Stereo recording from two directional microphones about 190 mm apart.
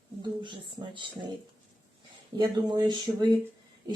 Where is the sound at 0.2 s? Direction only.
25° right (ahead or behind).